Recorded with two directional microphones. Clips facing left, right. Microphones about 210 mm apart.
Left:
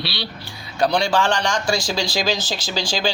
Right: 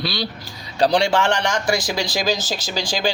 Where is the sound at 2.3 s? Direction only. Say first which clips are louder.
Right 1 dB; 45° right (ahead or behind).